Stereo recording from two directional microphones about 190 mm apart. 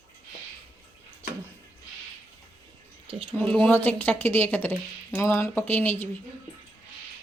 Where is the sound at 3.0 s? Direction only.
30° right (ahead or behind).